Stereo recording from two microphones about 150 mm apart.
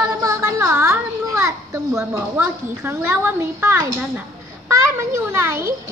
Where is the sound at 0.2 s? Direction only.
20° right (ahead or behind).